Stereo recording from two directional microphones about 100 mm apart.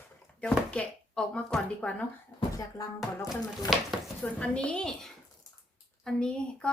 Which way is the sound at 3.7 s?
Centre (ahead or behind).